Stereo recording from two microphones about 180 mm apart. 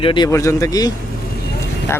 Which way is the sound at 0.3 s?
15° left (ahead or behind).